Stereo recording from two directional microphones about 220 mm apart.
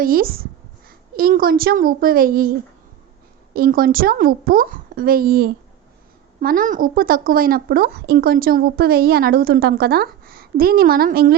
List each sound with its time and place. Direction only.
0.0 s a child's voice: 40° right (ahead or behind)